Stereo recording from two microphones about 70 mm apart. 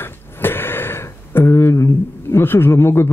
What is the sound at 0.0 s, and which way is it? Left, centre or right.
Speech, left.